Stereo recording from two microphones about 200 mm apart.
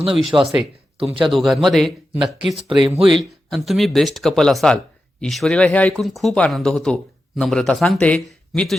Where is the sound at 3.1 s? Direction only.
Centre (ahead or behind).